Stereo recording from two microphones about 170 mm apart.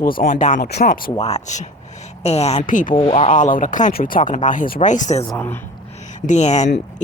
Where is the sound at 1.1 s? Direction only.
35° left (ahead or behind).